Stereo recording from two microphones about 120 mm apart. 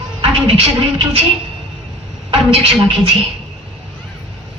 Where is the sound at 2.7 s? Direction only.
40° right (ahead or behind).